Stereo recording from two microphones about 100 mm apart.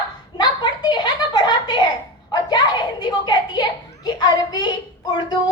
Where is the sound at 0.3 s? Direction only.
45° left (ahead or behind).